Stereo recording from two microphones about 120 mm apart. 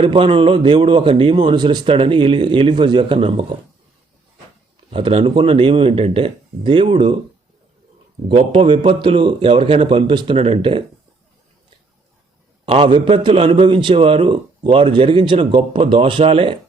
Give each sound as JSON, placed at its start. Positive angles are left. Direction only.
{"t": 0.0, "sound": "a man's voice", "side_deg": -45}
{"t": 4.9, "sound": "a man's voice", "side_deg": -50}
{"t": 8.3, "sound": "a man's voice", "side_deg": -45}
{"t": 12.6, "sound": "a man's voice", "side_deg": -45}